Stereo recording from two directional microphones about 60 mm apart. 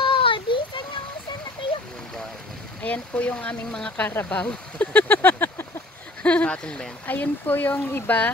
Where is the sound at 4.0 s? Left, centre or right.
Left.